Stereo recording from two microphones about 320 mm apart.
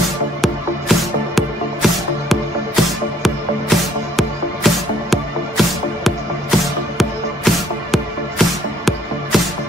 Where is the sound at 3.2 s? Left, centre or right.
Centre.